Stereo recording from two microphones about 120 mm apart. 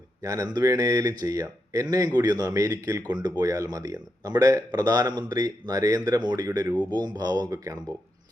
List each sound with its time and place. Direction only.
0.2 s speech: 30° right (ahead or behind)